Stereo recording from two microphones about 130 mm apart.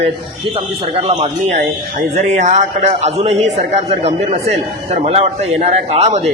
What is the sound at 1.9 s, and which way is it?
A man's voice, 65° right (ahead or behind).